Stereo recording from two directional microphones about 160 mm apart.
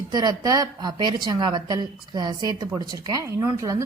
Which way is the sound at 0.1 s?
25° right (ahead or behind).